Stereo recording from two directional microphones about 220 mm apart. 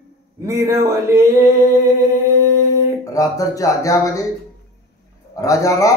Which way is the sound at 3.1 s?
15° left (ahead or behind).